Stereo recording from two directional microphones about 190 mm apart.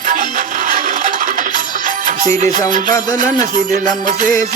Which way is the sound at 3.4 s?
35° right (ahead or behind).